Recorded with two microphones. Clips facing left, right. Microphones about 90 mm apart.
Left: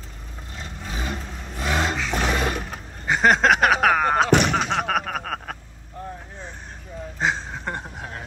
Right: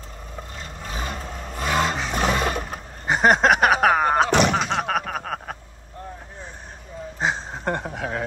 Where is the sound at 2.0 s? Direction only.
20° right (ahead or behind).